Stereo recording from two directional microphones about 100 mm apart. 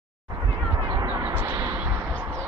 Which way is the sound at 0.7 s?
35° right (ahead or behind).